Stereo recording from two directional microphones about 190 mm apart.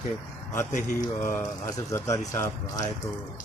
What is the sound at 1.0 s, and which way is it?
Speech, 15° left (ahead or behind).